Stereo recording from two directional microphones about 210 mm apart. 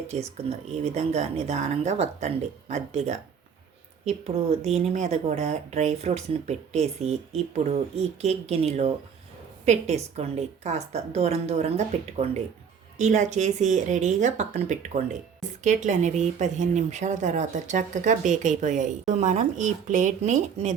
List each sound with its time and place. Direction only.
0.1 s speech: 30° right (ahead or behind)